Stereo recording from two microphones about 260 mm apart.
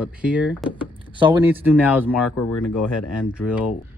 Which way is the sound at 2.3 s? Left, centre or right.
Left.